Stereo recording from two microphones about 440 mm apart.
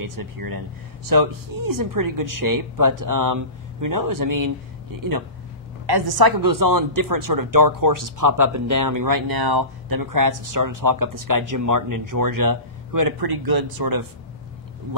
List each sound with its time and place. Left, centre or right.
0.0 s speech: right
5.9 s speech: right